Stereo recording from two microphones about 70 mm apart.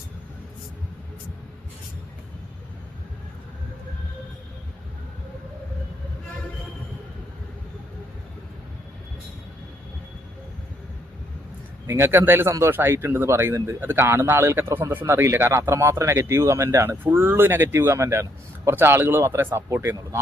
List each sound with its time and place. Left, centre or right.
11.9 s speech: right
12.5 s speech: right
17.0 s speech: right